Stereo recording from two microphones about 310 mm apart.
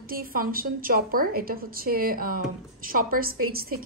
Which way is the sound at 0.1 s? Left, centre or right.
Right.